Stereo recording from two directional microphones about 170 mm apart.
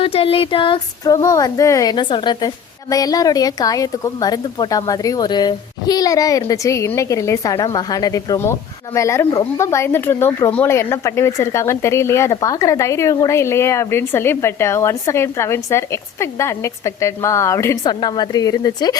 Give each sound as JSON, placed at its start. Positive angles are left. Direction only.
{"t": 0.0, "sound": "speech", "side_deg": 35}